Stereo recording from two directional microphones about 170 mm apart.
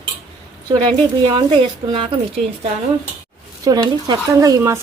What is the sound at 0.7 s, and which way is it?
Speech, 30° right (ahead or behind).